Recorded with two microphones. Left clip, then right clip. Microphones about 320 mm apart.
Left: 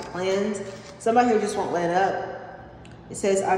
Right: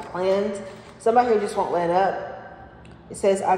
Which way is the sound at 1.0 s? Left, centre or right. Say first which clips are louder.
Right 1 dB; centre.